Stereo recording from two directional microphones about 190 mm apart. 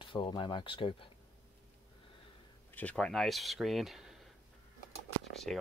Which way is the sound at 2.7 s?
5° left (ahead or behind).